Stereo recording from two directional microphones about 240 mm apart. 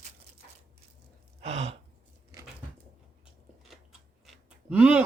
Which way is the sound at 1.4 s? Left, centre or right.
Right.